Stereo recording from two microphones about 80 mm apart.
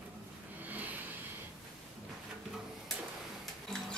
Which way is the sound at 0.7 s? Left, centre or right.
Centre.